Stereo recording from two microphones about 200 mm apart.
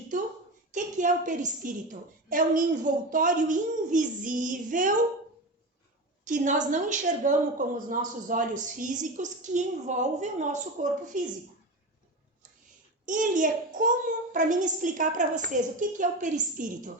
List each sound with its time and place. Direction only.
0.7 s a woman's voice: 40° right (ahead or behind)
6.2 s a woman's voice: 40° right (ahead or behind)
13.1 s a woman's voice: 40° right (ahead or behind)